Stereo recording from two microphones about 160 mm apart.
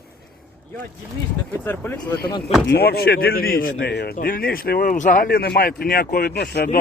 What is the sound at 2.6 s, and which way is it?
Speech, 80° left.